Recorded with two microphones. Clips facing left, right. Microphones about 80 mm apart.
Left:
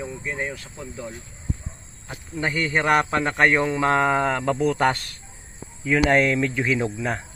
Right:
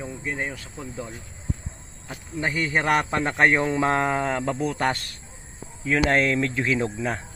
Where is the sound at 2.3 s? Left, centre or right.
Centre.